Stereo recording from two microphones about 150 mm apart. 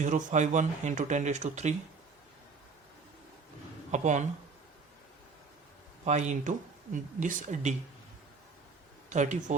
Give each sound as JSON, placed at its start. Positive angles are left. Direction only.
{"t": 0.0, "sound": "speech", "side_deg": -55}
{"t": 3.9, "sound": "speech", "side_deg": -50}
{"t": 6.1, "sound": "speech", "side_deg": -50}
{"t": 9.0, "sound": "speech", "side_deg": -55}